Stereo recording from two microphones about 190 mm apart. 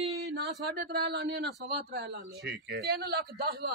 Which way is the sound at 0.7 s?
60° right (ahead or behind).